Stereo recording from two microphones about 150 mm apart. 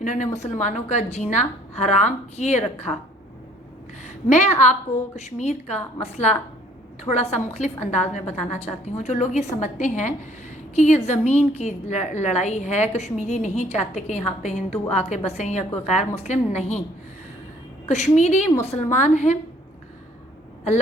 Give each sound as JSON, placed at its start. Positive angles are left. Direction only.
{"t": 0.0, "sound": "a woman's voice", "side_deg": 55}
{"t": 4.3, "sound": "a woman's voice", "side_deg": 50}
{"t": 17.8, "sound": "a woman's voice", "side_deg": 50}